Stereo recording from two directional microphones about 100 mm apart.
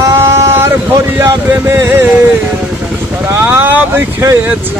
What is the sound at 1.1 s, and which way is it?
Speech, 20° right (ahead or behind).